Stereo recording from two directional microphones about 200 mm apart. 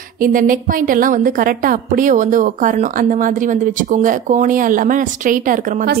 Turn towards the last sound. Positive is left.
turn(degrees=-40)  # may be behind; listen again after turning